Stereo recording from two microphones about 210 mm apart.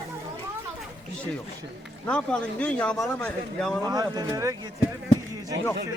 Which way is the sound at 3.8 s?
20° right (ahead or behind).